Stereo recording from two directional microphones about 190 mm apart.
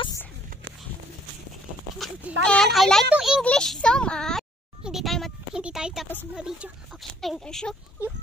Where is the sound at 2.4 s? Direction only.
5° left (ahead or behind).